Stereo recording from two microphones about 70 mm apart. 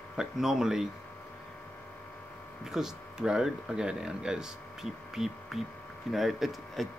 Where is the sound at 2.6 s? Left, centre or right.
Centre.